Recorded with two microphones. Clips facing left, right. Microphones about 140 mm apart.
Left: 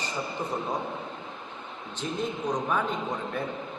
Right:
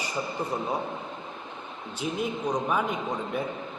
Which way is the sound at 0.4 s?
10° right (ahead or behind).